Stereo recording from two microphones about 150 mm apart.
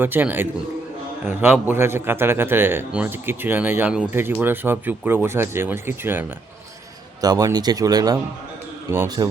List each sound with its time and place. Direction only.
0.0 s speech: 15° right (ahead or behind)
7.2 s speech: 25° right (ahead or behind)